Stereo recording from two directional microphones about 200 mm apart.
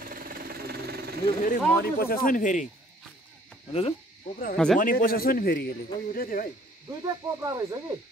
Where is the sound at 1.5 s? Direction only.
50° left (ahead or behind).